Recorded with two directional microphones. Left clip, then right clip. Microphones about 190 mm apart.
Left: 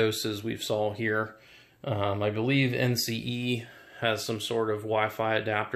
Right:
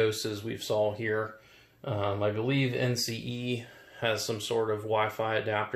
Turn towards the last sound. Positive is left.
turn(degrees=30)  # may be behind; listen again after turning